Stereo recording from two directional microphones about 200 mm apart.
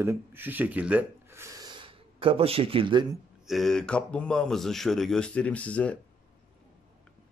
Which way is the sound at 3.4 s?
Centre (ahead or behind).